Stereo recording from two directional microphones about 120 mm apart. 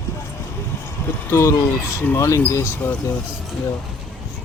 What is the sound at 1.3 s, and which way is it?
Speech, 20° left (ahead or behind).